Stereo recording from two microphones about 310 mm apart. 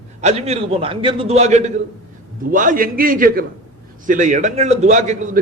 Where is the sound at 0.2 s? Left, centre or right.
Right.